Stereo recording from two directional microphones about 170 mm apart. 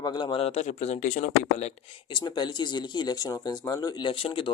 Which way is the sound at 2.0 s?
25° left (ahead or behind).